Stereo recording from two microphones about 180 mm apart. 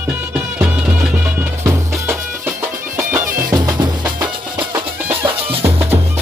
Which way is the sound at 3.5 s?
20° right (ahead or behind).